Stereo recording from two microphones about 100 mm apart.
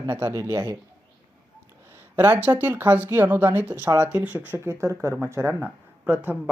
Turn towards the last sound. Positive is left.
turn(degrees=-20)  # may be behind; listen again after turning